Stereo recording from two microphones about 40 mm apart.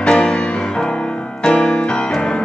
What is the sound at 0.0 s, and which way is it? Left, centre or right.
Music, centre.